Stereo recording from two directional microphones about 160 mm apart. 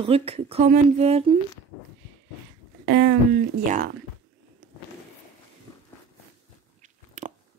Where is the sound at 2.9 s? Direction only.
75° right (ahead or behind).